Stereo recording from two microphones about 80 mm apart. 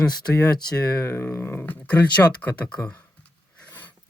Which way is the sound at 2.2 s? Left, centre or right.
Centre.